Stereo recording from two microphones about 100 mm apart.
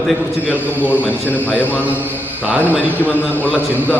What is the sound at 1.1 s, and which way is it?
Speech, 15° left (ahead or behind).